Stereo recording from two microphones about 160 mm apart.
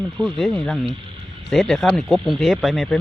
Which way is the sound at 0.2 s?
Centre (ahead or behind).